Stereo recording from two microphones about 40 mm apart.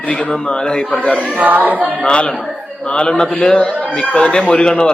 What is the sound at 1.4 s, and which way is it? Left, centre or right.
Speech, right.